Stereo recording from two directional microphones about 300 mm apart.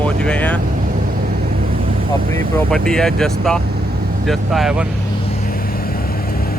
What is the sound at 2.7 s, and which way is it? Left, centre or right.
Speech, centre.